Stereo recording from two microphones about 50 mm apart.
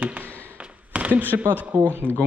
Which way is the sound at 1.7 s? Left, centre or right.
Right.